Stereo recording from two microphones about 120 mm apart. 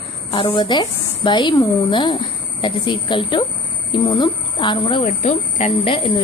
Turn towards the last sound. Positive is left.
turn(degrees=45)  # may be behind; listen again after turning